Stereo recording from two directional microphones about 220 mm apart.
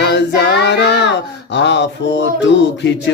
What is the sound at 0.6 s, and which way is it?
Child singing, 50° left (ahead or behind).